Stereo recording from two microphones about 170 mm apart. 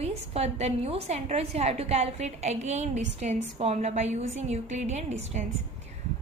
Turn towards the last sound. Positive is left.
turn(degrees=-40)  # may be behind; listen again after turning